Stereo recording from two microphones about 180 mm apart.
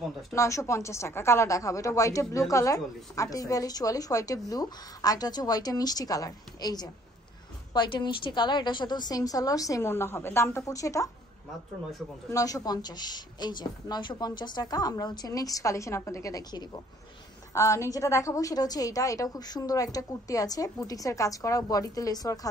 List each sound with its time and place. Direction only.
0.3 s speech: 15° left (ahead or behind)
12.3 s speech: 20° left (ahead or behind)